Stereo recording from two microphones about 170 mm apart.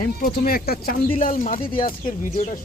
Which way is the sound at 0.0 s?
60° left (ahead or behind).